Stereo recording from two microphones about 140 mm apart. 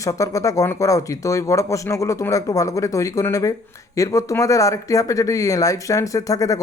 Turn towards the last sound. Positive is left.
turn(degrees=25)  # may be behind; listen again after turning